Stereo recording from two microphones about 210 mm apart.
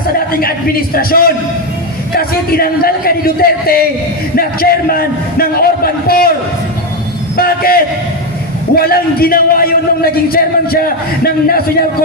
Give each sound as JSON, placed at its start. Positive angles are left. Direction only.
{"t": 0.3, "sound": "a man's voice", "side_deg": 45}
{"t": 7.3, "sound": "a sound", "side_deg": 45}
{"t": 8.7, "sound": "a man's voice", "side_deg": 45}